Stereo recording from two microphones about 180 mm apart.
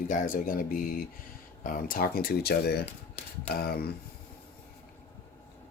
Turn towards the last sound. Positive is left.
turn(degrees=55)  # may be behind; listen again after turning